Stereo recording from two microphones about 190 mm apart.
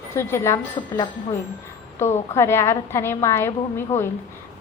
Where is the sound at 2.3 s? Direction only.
15° left (ahead or behind).